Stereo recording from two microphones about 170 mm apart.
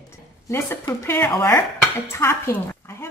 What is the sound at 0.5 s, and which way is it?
Speech, 15° left (ahead or behind).